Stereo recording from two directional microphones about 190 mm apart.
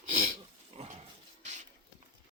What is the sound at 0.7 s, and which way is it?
Dog, 35° right (ahead or behind).